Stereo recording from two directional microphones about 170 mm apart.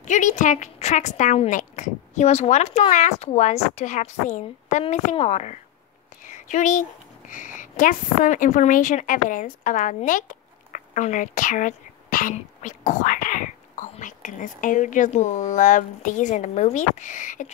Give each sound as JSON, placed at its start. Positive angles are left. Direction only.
{"t": 0.0, "sound": "a woman's voice", "side_deg": 45}
{"t": 6.3, "sound": "a sound", "side_deg": 45}
{"t": 7.2, "sound": "a woman's voice", "side_deg": 50}